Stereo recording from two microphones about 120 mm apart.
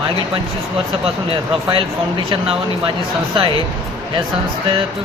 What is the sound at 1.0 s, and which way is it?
Speech, 50° right (ahead or behind).